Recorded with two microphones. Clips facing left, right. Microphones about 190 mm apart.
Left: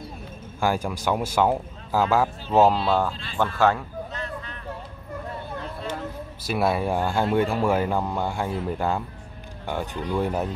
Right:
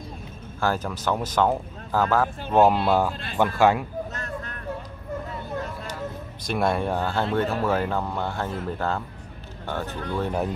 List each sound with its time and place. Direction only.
0.6 s speech: 10° left (ahead or behind)
2.5 s speech: centre (ahead or behind)
4.1 s a sound: 45° right (ahead or behind)
6.4 s speech: 5° left (ahead or behind)